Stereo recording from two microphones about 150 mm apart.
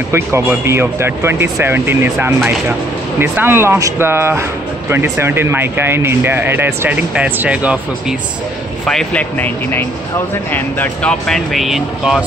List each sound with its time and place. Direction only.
0.1 s speech: 15° right (ahead or behind)
8.8 s speech: 5° left (ahead or behind)